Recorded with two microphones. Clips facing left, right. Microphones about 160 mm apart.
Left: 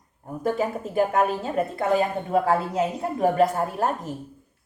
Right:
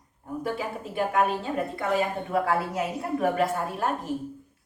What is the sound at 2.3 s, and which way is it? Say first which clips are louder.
A woman's voice: left 5 dB; 30° left (ahead or behind).